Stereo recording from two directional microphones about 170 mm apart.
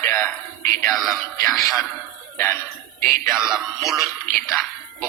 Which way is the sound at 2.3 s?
15° left (ahead or behind).